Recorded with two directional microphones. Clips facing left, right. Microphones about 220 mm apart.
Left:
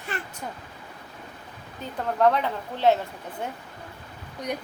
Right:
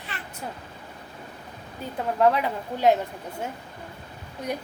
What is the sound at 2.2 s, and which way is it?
Speech, 10° right (ahead or behind).